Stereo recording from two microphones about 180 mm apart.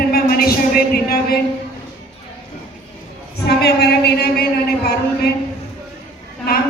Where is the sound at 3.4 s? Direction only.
65° left (ahead or behind).